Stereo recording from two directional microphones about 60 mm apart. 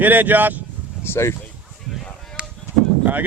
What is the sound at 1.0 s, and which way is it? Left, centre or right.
Speech, left.